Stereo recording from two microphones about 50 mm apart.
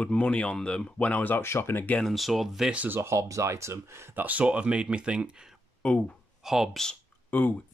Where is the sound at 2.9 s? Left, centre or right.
Right.